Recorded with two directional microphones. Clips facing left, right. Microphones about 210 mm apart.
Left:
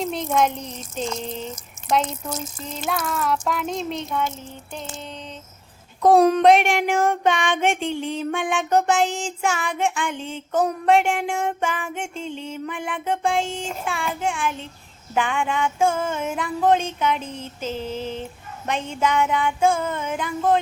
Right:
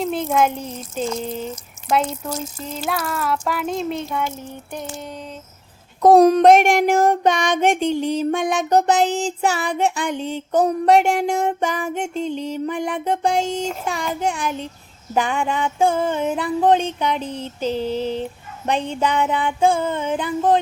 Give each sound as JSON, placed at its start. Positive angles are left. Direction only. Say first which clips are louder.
{"t": 0.0, "sound": "speech", "louder": "right 2 dB", "side_deg": -5}
{"t": 4.7, "sound": "a sound", "louder": "right 3 dB", "side_deg": -15}
{"t": 6.0, "sound": "child singing", "louder": "right 4 dB", "side_deg": -40}